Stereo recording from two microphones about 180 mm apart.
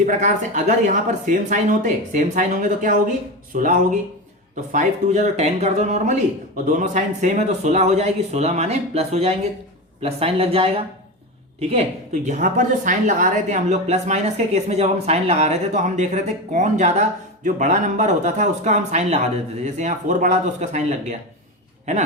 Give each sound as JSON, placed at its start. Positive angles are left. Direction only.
{"t": 0.0, "sound": "a woman's voice", "side_deg": -45}